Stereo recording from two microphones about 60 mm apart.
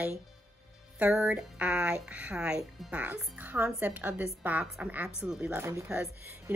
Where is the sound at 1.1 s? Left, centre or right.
Right.